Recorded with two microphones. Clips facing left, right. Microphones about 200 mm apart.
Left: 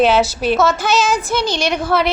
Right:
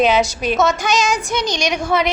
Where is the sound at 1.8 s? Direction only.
5° left (ahead or behind).